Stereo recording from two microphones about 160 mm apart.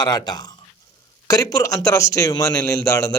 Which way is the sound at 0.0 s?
25° left (ahead or behind).